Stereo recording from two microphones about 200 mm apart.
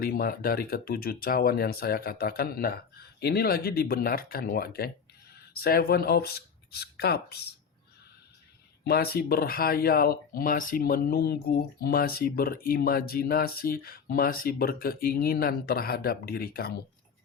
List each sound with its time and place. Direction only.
0.0 s speech: 50° left (ahead or behind)
8.8 s speech: 50° left (ahead or behind)